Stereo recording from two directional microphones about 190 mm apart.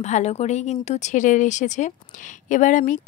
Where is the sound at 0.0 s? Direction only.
35° left (ahead or behind).